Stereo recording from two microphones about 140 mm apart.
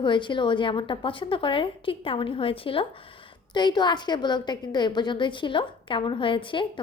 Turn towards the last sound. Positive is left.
turn(degrees=35)  # may be behind; listen again after turning